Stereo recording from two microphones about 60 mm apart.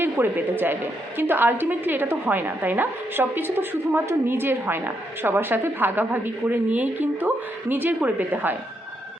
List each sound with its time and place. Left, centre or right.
0.0 s a woman's voice: right